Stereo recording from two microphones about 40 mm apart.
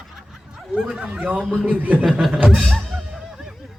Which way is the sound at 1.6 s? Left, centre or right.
Right.